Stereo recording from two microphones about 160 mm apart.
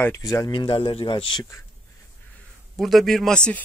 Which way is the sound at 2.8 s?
Centre (ahead or behind).